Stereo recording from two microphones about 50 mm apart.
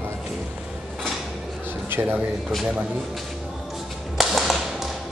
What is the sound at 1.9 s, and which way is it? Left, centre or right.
Speech, right.